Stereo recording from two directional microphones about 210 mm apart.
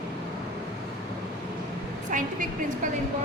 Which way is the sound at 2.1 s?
40° right (ahead or behind).